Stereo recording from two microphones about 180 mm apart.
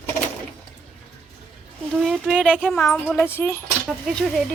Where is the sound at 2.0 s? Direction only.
5° right (ahead or behind); by 3.6 s 10° left (ahead or behind).